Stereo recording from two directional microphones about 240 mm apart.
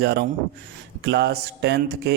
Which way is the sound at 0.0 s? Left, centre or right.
Right.